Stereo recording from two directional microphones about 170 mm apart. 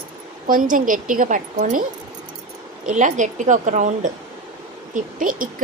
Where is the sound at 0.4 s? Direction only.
55° right (ahead or behind).